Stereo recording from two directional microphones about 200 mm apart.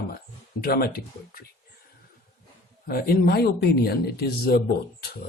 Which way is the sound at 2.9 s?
50° left (ahead or behind).